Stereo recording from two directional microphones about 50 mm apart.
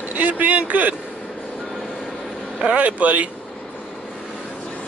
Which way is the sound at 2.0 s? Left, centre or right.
Centre.